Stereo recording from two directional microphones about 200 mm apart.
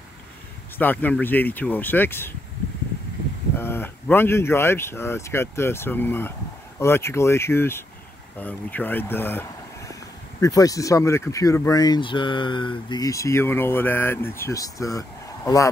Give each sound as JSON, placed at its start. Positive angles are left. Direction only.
{"t": 0.7, "sound": "speech", "side_deg": 10}
{"t": 3.5, "sound": "speech", "side_deg": 10}